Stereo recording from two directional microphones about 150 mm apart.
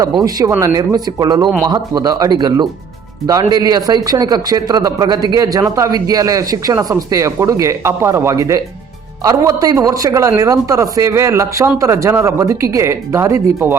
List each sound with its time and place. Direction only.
0.0 s speech: 25° right (ahead or behind)